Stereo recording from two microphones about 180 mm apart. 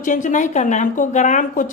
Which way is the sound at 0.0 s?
45° left (ahead or behind).